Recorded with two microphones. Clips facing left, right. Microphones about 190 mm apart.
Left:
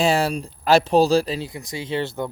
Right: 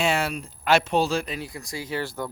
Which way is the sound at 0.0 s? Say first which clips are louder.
Left 5 dB; 35° left (ahead or behind).